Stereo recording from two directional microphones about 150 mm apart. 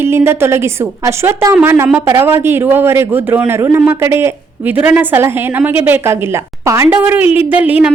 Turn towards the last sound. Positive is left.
turn(degrees=-10)  # may be behind; listen again after turning